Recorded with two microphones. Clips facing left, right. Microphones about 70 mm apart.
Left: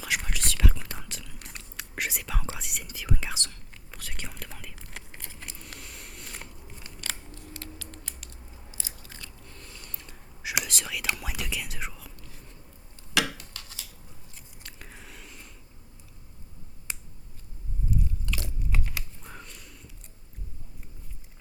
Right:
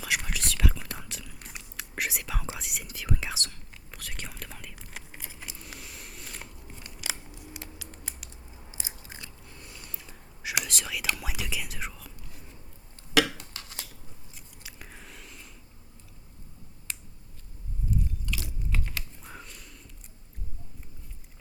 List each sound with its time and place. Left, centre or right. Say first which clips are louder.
0.0 s whispering: even; centre
8.7 s biting: right 2 dB; right
9.5 s a sound: even; centre
10.6 s whispering: even; centre
13.4 s a sound: right 2 dB; right
14.3 s biting: even; centre
16.9 s finger snapping: left 1 dB; centre
17.9 s biting: left 1 dB; centre
19.2 s a sound: even; centre